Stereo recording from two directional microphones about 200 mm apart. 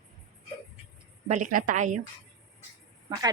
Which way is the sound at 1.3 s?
40° right (ahead or behind).